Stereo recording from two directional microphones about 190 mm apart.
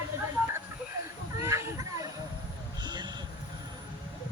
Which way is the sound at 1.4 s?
15° right (ahead or behind).